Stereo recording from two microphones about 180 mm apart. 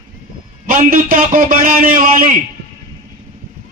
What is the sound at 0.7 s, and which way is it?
A man's voice, 50° right (ahead or behind).